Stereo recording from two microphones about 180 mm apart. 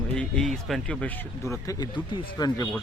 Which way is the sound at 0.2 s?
5° left (ahead or behind).